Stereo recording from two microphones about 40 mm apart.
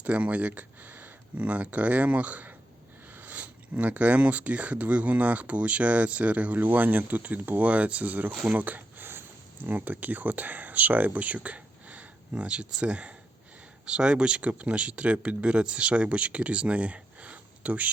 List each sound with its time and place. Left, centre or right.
0.0 s speech: right
6.7 s speech: right
7.6 s speech: right